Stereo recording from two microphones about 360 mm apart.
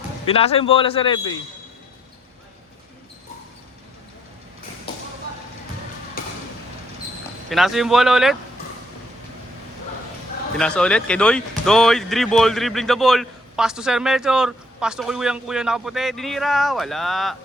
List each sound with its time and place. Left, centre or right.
0.3 s speech: centre
6.2 s a sound: left
7.5 s speech: centre
10.6 s speech: centre